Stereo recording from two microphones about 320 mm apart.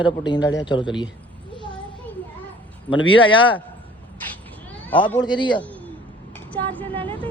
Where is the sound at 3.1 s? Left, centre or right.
Centre.